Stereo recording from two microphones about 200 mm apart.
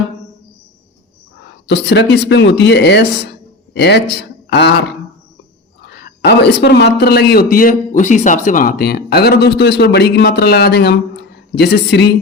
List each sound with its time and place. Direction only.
1.6 s speech: 60° left (ahead or behind)
5.9 s speech: 55° left (ahead or behind)